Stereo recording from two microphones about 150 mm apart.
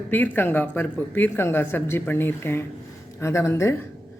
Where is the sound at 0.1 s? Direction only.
15° left (ahead or behind).